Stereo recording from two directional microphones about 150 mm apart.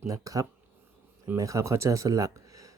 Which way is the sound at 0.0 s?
20° right (ahead or behind).